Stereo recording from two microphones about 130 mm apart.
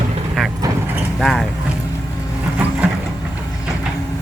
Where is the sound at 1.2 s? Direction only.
Centre (ahead or behind).